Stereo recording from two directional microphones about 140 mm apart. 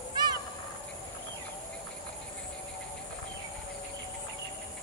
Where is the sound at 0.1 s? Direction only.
30° right (ahead or behind).